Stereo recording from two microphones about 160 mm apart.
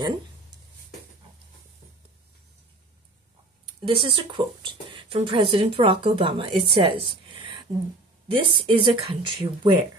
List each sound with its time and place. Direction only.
3.8 s speech: 35° right (ahead or behind)
6.7 s a sound: 35° right (ahead or behind)
8.3 s speech: 30° right (ahead or behind)